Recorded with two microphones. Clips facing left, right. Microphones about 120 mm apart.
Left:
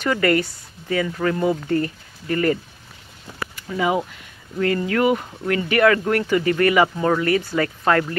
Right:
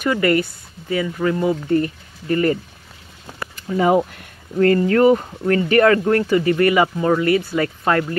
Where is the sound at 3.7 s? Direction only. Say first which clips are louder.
Right 5 dB; 45° right (ahead or behind).